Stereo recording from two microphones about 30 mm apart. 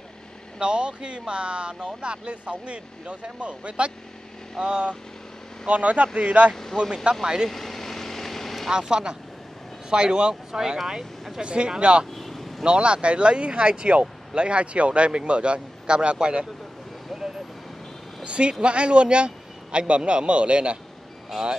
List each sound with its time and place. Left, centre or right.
0.6 s speech: right
5.7 s speech: right
6.5 s speech: centre
7.0 s speech: right
7.4 s vehicle: centre
8.6 s speech: right
10.5 s speech: right
11.4 s speech: right
12.2 s vehicle: centre
12.6 s speech: right
17.1 s vehicle: centre
18.2 s speech: right